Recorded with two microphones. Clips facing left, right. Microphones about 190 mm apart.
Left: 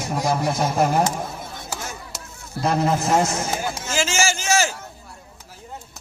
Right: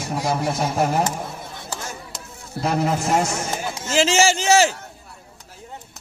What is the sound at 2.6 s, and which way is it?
Speech, 10° right (ahead or behind).